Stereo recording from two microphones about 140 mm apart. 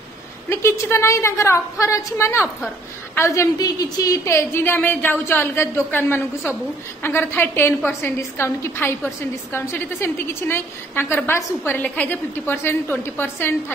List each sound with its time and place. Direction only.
0.5 s a woman's voice: 20° left (ahead or behind)